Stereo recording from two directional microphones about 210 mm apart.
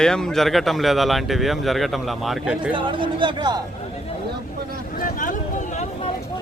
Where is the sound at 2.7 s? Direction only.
25° right (ahead or behind).